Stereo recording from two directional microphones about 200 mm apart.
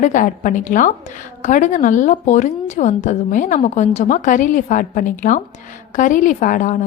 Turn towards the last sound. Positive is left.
turn(degrees=40)  # may be behind; listen again after turning